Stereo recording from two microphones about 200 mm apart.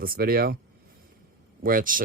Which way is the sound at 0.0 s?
45° right (ahead or behind).